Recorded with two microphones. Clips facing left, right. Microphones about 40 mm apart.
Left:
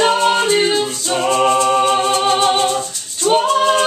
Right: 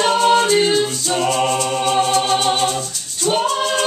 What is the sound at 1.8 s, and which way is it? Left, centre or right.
Music, centre.